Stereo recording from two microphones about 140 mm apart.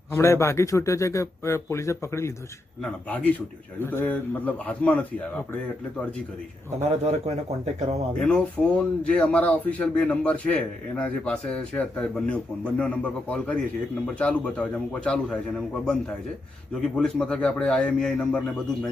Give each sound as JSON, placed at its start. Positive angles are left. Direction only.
{"t": 0.1, "sound": "a man's voice", "side_deg": 20}
{"t": 6.8, "sound": "a man's voice", "side_deg": -50}
{"t": 8.2, "sound": "speech", "side_deg": 5}
{"t": 16.8, "sound": "speech", "side_deg": 5}